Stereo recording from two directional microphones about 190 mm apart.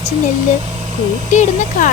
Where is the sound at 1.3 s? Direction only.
40° left (ahead or behind).